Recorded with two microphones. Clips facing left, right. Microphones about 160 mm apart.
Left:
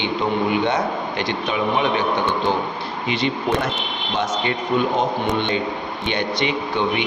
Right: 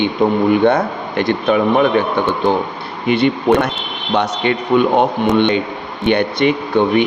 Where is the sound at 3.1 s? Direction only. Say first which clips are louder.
Right 9 dB; 60° right (ahead or behind).